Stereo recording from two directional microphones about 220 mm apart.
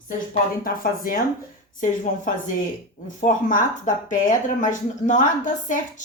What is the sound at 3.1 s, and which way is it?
Speech, 35° left (ahead or behind).